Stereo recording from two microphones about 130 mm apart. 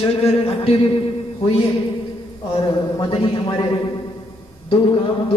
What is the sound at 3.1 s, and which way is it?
Music, 45° left (ahead or behind).